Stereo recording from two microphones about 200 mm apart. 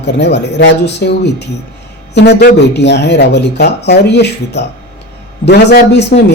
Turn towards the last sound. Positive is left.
turn(degrees=55)  # may be behind; listen again after turning